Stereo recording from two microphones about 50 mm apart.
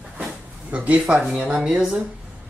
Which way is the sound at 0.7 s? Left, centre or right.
Right.